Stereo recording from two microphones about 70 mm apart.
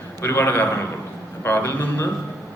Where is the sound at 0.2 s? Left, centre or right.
Left.